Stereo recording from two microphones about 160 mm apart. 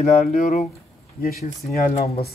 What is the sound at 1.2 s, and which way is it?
Speech, 60° left (ahead or behind).